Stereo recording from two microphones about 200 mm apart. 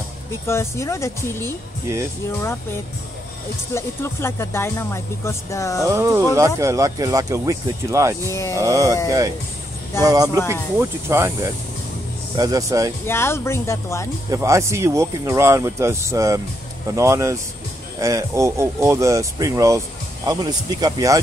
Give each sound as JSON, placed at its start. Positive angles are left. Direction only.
{"t": 0.5, "sound": "speech", "side_deg": 15}
{"t": 3.7, "sound": "speech", "side_deg": 15}
{"t": 5.9, "sound": "speech", "side_deg": -15}
{"t": 8.3, "sound": "speech", "side_deg": 15}
{"t": 8.5, "sound": "speech", "side_deg": -15}
{"t": 10.0, "sound": "speech", "side_deg": -20}
{"t": 13.0, "sound": "speech", "side_deg": 10}
{"t": 14.3, "sound": "speech", "side_deg": -15}